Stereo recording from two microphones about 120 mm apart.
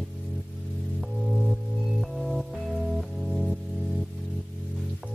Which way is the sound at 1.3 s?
Centre (ahead or behind).